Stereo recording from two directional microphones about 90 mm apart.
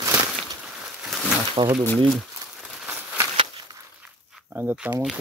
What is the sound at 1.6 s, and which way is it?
Speech, 70° right (ahead or behind).